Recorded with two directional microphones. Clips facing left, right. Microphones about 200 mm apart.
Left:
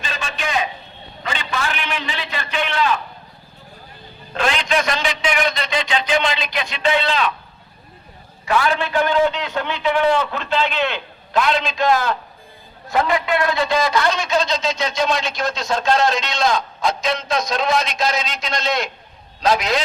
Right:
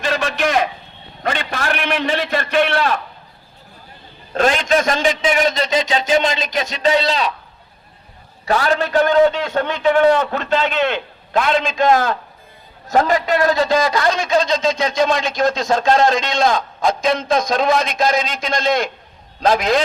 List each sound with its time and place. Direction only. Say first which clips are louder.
0.0 s a sound: right 8 dB; 70° right (ahead or behind)
1.2 s a man's voice: right 3 dB; 55° right (ahead or behind)
4.4 s a man's voice: right 4 dB; 40° right (ahead or behind)
8.4 s a man's voice: right 2 dB; 40° right (ahead or behind)